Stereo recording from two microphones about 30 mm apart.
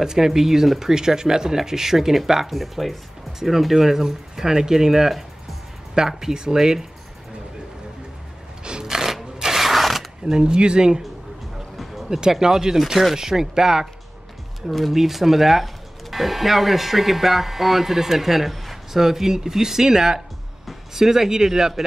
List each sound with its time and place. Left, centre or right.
0.0 s speech: centre
8.8 s a sound: centre
10.2 s speech: right
11.8 s music: centre
12.1 s speech: centre
14.7 s speech: centre